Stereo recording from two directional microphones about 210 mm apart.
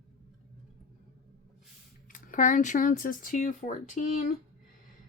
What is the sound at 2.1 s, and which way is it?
Speech, 40° left (ahead or behind).